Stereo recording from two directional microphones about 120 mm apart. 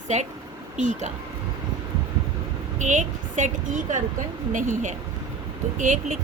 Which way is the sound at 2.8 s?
90° right.